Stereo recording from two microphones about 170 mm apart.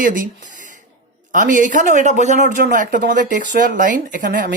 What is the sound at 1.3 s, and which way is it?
Speech, 50° right (ahead or behind).